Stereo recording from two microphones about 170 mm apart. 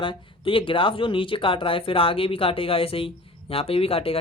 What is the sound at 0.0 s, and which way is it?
Speech, 30° left (ahead or behind).